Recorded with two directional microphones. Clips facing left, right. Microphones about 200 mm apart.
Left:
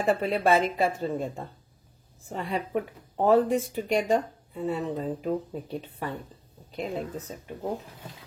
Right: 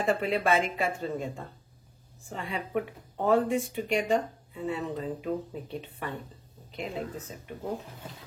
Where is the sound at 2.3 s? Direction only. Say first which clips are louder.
Left 3 dB; 40° left (ahead or behind).